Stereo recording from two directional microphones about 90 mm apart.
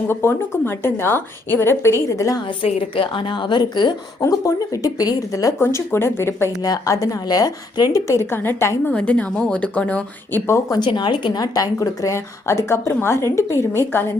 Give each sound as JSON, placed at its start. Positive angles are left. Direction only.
{"t": 0.1, "sound": "a woman's voice", "side_deg": 25}
{"t": 2.6, "sound": "a woman's voice", "side_deg": 75}
{"t": 4.2, "sound": "a woman's voice", "side_deg": 40}
{"t": 5.5, "sound": "a woman's voice", "side_deg": 30}
{"t": 6.6, "sound": "a woman's voice", "side_deg": 40}
{"t": 8.9, "sound": "a woman's voice", "side_deg": 15}
{"t": 10.7, "sound": "a woman's voice", "side_deg": 55}